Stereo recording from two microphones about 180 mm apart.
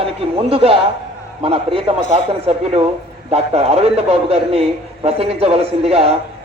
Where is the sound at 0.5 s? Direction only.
30° right (ahead or behind).